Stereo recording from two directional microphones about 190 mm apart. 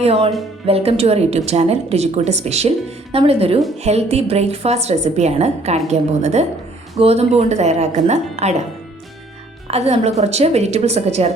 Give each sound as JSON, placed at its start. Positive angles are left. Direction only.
{"t": 0.0, "sound": "a woman's voice", "side_deg": -30}
{"t": 9.6, "sound": "a woman's voice", "side_deg": -35}